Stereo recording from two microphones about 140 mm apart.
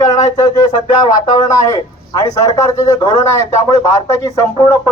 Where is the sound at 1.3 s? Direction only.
30° left (ahead or behind).